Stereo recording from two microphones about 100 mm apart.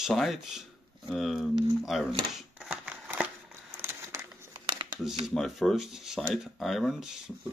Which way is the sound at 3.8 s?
25° right (ahead or behind).